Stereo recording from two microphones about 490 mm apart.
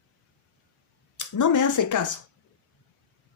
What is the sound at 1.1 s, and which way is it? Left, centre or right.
Speech, left.